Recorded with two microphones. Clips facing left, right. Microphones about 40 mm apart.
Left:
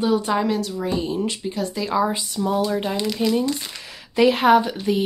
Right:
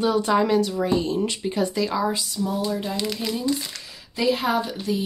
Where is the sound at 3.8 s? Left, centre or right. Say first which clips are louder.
Left 8 dB; left.